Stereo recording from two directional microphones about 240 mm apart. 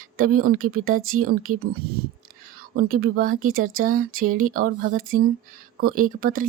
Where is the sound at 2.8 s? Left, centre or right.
Right.